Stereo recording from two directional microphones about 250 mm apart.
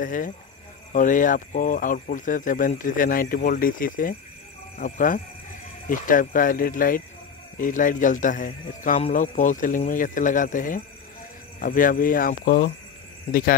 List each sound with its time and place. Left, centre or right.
0.0 s speech: left